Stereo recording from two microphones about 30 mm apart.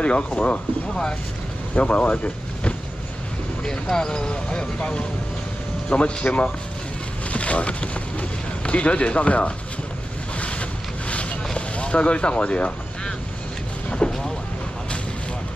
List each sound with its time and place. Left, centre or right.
0.0 s speech: left
1.8 s speech: left
3.9 s speech: left
5.9 s speech: left
10.4 s boat: left
11.5 s speech: left
13.8 s vehicle: left